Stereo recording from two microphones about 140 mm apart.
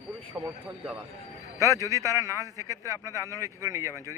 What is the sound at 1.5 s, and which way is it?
A man's voice, 25° right (ahead or behind).